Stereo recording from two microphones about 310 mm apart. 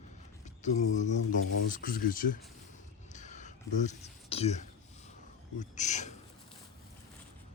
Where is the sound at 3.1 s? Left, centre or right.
Left.